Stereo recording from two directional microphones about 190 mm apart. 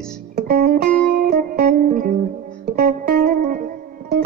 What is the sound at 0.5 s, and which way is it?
Music, 50° right (ahead or behind).